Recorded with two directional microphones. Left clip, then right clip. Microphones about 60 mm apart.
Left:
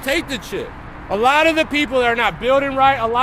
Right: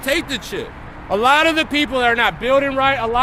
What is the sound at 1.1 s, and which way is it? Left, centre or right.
Speech, right.